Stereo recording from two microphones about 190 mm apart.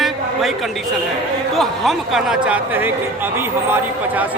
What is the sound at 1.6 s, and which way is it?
A man's voice, centre (ahead or behind).